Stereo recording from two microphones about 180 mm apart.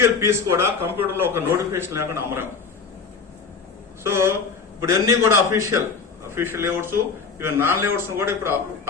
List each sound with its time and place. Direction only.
0.0 s a man's voice: 15° right (ahead or behind)
4.0 s a man's voice: 15° right (ahead or behind)